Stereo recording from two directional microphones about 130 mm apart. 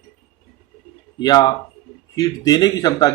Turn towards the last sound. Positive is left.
turn(degrees=30)  # may be behind; listen again after turning